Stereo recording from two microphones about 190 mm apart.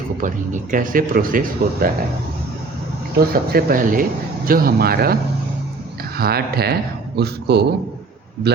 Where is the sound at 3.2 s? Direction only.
50° right (ahead or behind).